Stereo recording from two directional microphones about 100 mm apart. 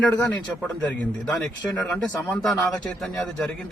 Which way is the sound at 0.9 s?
15° left (ahead or behind).